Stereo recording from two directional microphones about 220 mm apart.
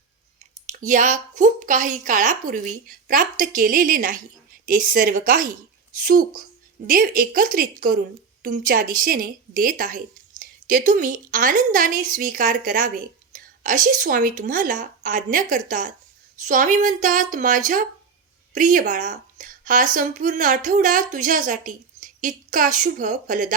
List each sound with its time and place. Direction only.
0.7 s speech: 35° right (ahead or behind)